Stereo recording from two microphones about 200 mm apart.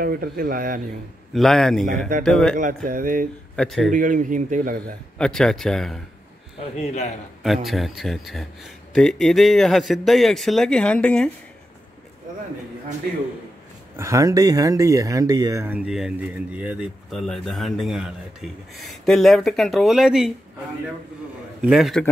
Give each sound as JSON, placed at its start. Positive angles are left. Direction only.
{"t": 0.0, "sound": "speech", "side_deg": -45}
{"t": 1.3, "sound": "speech", "side_deg": 0}
{"t": 2.5, "sound": "speech", "side_deg": -40}
{"t": 3.5, "sound": "speech", "side_deg": 0}
{"t": 3.9, "sound": "a man's voice", "side_deg": -40}
{"t": 5.2, "sound": "speech", "side_deg": 5}
{"t": 6.9, "sound": "a man's voice", "side_deg": 35}
{"t": 7.4, "sound": "speech", "side_deg": 0}
{"t": 13.9, "sound": "speech", "side_deg": -15}
{"t": 21.6, "sound": "speech", "side_deg": 0}